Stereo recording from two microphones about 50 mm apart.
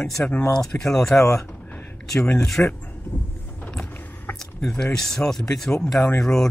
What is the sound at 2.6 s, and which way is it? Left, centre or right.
Speech, left.